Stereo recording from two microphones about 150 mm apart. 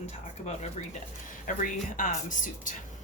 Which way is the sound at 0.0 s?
50° left (ahead or behind).